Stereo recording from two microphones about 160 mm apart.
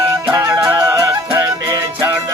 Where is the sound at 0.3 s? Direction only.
20° right (ahead or behind).